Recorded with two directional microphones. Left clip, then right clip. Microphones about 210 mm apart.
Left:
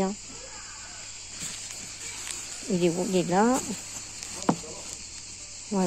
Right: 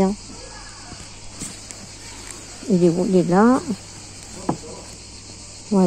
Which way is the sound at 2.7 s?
Centre (ahead or behind).